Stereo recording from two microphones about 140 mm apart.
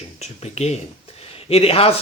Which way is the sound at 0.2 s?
50° left (ahead or behind).